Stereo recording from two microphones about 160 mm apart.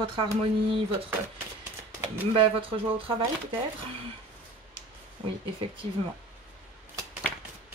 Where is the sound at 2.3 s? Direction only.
35° right (ahead or behind).